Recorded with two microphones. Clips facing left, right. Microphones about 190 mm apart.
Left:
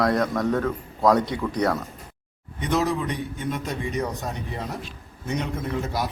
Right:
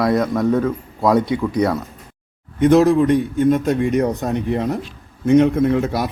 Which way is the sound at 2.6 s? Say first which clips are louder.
Right 12 dB; 55° right (ahead or behind).